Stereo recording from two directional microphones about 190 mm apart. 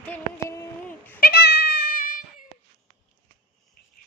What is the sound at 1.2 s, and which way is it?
Cat, 55° left (ahead or behind).